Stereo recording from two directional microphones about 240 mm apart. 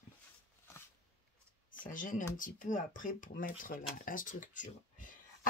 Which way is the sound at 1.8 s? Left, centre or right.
Left.